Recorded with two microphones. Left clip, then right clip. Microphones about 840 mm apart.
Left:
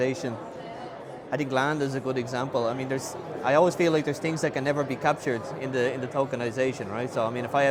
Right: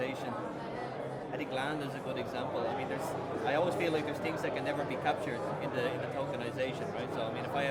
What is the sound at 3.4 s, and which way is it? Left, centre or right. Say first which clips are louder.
Speech: left 10 dB; left.